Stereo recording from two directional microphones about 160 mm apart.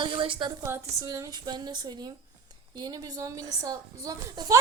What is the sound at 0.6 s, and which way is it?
Speech, 20° right (ahead or behind).